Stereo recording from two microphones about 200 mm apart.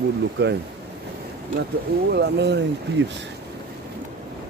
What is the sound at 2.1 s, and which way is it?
Speech, 55° right (ahead or behind).